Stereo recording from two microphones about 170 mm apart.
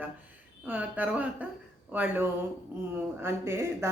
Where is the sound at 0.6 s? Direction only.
10° right (ahead or behind).